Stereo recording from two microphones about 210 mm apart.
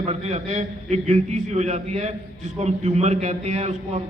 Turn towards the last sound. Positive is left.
turn(degrees=-35)  # may be behind; listen again after turning